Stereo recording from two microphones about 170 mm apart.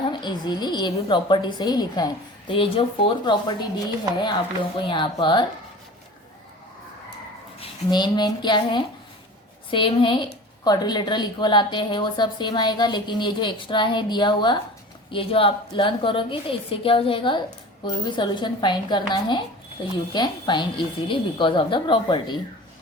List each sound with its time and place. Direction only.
0.1 s a woman's voice: 25° left (ahead or behind)
4.9 s a woman's voice: 25° left (ahead or behind)
7.6 s a woman's voice: 25° left (ahead or behind)